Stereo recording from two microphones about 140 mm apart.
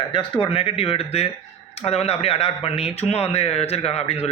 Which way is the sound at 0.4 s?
40° left (ahead or behind).